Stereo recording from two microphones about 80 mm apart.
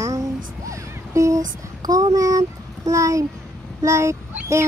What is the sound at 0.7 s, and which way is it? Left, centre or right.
Music, right.